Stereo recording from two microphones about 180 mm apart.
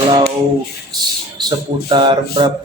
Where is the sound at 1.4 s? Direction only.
25° right (ahead or behind).